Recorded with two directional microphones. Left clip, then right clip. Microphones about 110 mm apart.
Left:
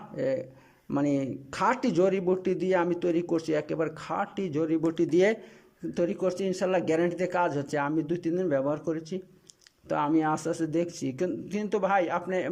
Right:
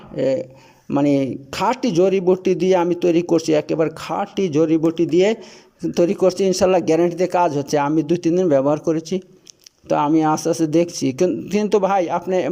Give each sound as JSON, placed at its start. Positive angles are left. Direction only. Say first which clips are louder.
{"t": 0.2, "sound": "speech", "louder": "right 10 dB", "side_deg": -20}
{"t": 5.8, "sound": "a man's voice", "louder": "right 12 dB", "side_deg": -35}